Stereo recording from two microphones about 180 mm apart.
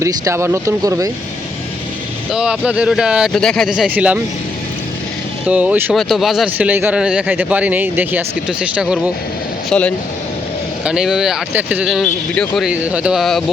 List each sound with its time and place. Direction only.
0.0 s a man's voice: 15° right (ahead or behind)
2.3 s a man's voice: 5° right (ahead or behind)
5.5 s a man's voice: 10° right (ahead or behind)
9.6 s speech: 5° left (ahead or behind)
10.8 s speech: 5° right (ahead or behind)
12.7 s speech: 5° right (ahead or behind)